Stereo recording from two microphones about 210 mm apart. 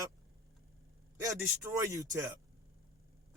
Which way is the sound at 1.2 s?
15° right (ahead or behind).